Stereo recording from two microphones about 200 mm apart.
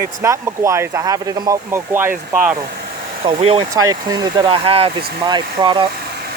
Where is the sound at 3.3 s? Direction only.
25° right (ahead or behind).